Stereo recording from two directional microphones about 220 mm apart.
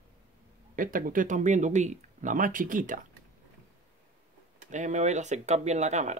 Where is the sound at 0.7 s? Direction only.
40° right (ahead or behind).